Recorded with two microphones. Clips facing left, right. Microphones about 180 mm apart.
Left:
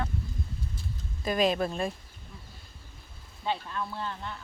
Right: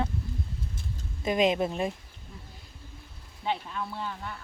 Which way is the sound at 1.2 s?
20° right (ahead or behind).